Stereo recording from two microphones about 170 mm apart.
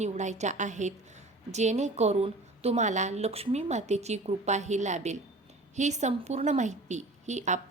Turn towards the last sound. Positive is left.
turn(degrees=-45)  # may be behind; listen again after turning